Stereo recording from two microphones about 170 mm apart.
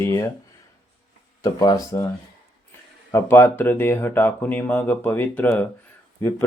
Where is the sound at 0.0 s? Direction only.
15° left (ahead or behind).